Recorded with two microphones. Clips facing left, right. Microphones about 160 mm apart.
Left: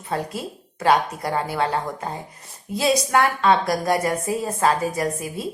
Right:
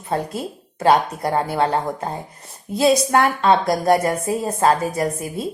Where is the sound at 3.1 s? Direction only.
30° right (ahead or behind).